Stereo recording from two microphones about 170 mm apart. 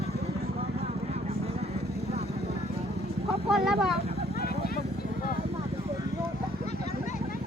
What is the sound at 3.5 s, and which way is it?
Speech, centre (ahead or behind).